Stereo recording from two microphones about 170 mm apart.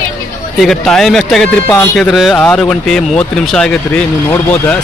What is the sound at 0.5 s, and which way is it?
Speech, centre (ahead or behind).